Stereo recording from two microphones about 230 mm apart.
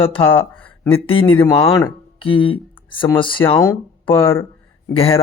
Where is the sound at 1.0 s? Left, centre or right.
Left.